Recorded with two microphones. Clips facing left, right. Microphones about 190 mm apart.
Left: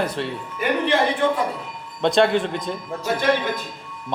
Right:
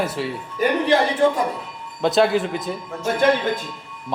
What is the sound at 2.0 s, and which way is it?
Speech, centre (ahead or behind).